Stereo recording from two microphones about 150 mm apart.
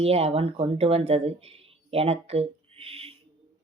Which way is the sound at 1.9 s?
40° right (ahead or behind).